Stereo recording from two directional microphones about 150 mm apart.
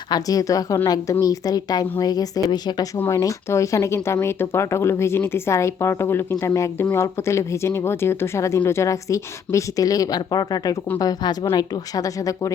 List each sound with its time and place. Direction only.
0.1 s speech: 25° left (ahead or behind)